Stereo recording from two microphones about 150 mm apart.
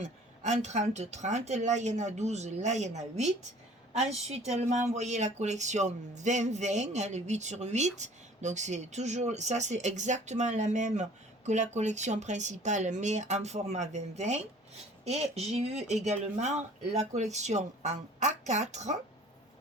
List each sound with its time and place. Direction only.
0.0 s speech: 50° right (ahead or behind)